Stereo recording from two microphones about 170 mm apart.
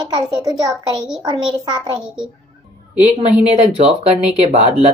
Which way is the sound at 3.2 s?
40° right (ahead or behind).